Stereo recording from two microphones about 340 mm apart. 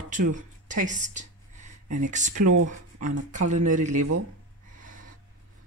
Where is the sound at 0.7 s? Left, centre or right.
Right.